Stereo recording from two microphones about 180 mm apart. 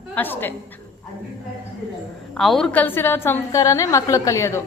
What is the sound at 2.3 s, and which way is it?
A woman's voice, centre (ahead or behind).